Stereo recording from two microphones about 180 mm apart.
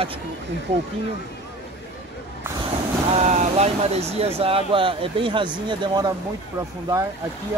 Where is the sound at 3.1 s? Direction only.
40° right (ahead or behind); by 6.1 s 25° right (ahead or behind).